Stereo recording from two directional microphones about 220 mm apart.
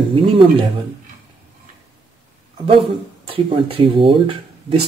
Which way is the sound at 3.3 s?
25° right (ahead or behind).